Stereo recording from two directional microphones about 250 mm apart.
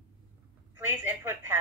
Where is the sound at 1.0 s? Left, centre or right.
Centre.